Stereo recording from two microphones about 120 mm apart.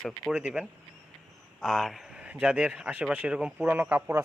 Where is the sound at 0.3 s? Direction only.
10° right (ahead or behind).